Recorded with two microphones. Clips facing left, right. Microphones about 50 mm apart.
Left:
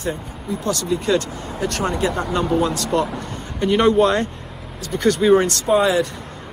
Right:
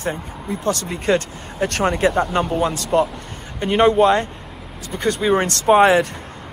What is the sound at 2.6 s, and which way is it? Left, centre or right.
Speech, right.